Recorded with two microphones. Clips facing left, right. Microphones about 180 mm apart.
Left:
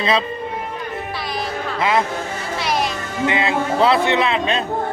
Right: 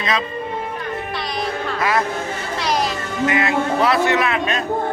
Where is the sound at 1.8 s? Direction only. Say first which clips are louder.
Left 2 dB; 20° left (ahead or behind).